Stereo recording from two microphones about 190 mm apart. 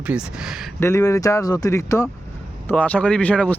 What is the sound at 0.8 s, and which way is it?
Speech, 15° left (ahead or behind).